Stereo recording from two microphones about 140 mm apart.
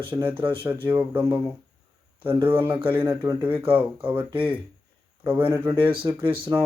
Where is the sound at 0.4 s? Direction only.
35° right (ahead or behind).